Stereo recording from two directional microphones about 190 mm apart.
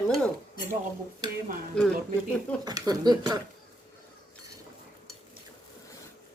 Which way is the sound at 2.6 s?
20° right (ahead or behind).